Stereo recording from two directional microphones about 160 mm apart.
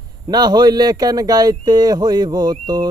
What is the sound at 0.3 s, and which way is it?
Speech, 25° right (ahead or behind).